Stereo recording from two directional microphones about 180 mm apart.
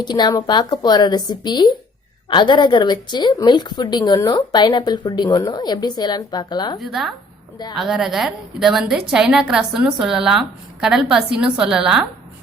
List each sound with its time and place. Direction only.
0.0 s a woman's voice: 25° left (ahead or behind)
6.7 s a woman's voice: centre (ahead or behind)